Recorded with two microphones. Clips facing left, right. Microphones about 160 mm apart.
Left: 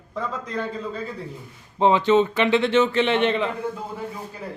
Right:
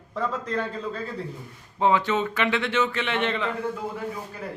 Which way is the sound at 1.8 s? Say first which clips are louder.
Left 5 dB; 25° left (ahead or behind).